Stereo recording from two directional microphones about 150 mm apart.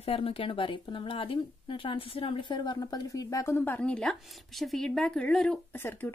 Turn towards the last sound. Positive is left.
turn(degrees=10)  # may be behind; listen again after turning